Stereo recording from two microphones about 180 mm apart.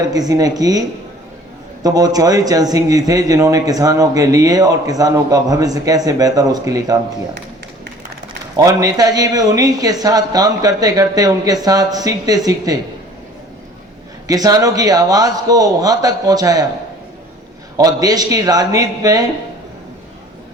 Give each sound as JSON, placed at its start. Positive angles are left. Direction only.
{"t": 0.0, "sound": "speech", "side_deg": -20}
{"t": 8.5, "sound": "speech", "side_deg": -20}
{"t": 14.3, "sound": "speech", "side_deg": -20}
{"t": 17.7, "sound": "speech", "side_deg": -20}